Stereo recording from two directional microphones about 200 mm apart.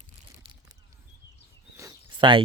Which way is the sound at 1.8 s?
20° right (ahead or behind).